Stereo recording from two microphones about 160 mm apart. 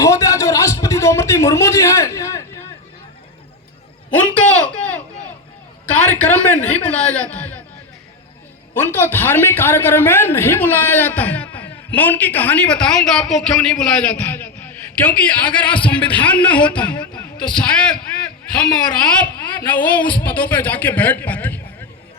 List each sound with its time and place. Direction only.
0.0 s a sound: 20° left (ahead or behind)
4.1 s a man's voice: 10° left (ahead or behind)
8.7 s a man's voice: 15° left (ahead or behind)
14.3 s a man's voice: 10° left (ahead or behind)